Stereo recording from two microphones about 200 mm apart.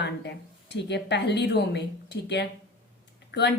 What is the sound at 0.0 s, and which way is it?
A woman's voice, 60° left (ahead or behind).